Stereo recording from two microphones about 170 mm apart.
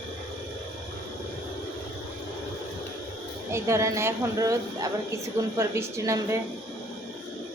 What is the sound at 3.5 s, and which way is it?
A woman's voice, 15° right (ahead or behind).